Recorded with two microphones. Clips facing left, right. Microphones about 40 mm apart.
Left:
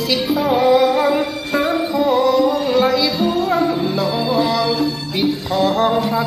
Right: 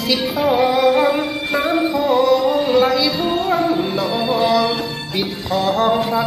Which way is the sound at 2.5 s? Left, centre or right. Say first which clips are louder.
Right 1 dB; centre.